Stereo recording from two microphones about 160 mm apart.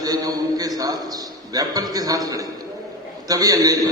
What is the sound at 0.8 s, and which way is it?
A man's voice, 25° right (ahead or behind).